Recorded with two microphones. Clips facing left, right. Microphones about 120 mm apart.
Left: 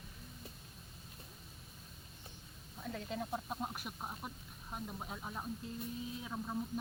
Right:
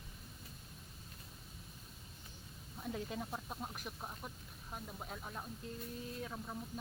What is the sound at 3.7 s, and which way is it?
Speech, 5° left (ahead or behind).